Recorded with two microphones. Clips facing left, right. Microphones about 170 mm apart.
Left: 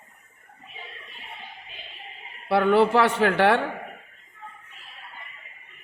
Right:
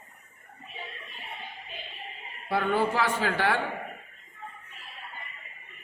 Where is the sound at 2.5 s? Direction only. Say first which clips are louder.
Left 7 dB; 70° left (ahead or behind).